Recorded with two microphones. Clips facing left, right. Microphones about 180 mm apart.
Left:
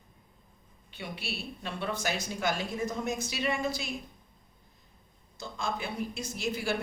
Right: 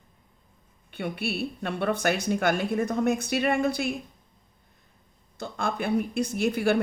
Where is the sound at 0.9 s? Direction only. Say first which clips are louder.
Right 9 dB; 55° right (ahead or behind).